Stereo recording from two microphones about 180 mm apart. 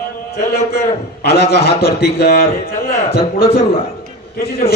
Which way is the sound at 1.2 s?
60° left (ahead or behind).